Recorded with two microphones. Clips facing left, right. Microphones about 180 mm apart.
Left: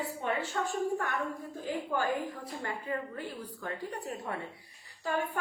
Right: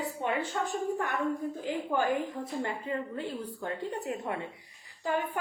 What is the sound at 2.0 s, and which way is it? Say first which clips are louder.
A woman's voice: right 3 dB; 25° right (ahead or behind).